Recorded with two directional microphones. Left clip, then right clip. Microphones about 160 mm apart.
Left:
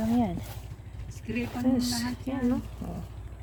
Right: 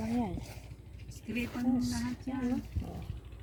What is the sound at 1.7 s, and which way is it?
Speech, 55° left (ahead or behind).